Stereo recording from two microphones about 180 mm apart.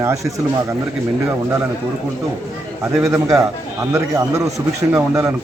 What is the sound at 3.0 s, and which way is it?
A man's voice, 15° right (ahead or behind).